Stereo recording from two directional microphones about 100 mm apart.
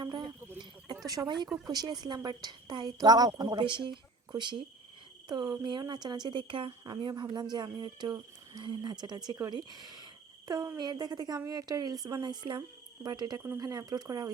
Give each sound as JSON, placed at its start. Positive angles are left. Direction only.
{"t": 0.0, "sound": "cricket", "side_deg": -45}
{"t": 1.0, "sound": "a woman's voice", "side_deg": -40}
{"t": 7.1, "sound": "a woman's voice", "side_deg": -45}